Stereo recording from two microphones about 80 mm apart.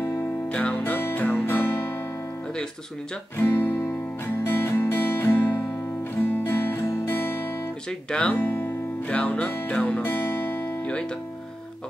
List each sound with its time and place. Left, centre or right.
0.5 s music: centre
3.3 s guitar: left
4.3 s music: left
8.1 s speech: centre
8.4 s speech: left
9.1 s guitar: centre